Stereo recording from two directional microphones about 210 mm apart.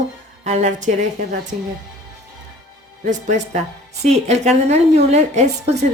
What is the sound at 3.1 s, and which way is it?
A woman's voice, 35° right (ahead or behind).